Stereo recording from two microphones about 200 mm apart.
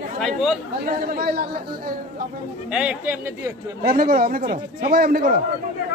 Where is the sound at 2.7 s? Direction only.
5° right (ahead or behind).